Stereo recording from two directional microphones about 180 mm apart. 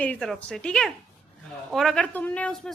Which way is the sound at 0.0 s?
5° left (ahead or behind).